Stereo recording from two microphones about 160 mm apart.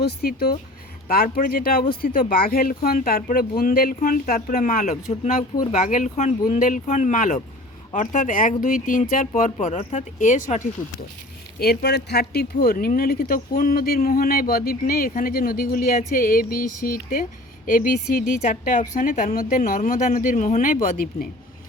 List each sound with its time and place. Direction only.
0.0 s speech: 75° left (ahead or behind); by 10.6 s 50° left (ahead or behind)
11.6 s speech: 85° left; by 20.7 s 55° left (ahead or behind)